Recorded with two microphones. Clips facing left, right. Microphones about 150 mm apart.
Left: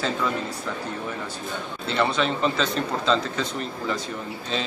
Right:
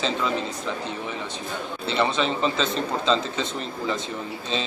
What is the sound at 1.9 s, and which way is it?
A man's voice, centre (ahead or behind).